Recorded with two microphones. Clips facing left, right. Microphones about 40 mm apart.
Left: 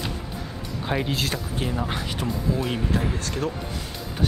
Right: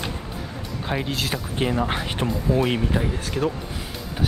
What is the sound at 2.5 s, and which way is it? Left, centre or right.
Speech, right.